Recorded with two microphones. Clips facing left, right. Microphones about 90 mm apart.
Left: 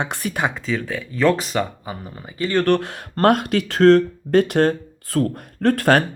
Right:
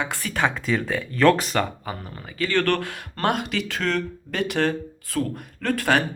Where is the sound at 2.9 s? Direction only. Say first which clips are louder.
Left 7 dB; 40° left (ahead or behind).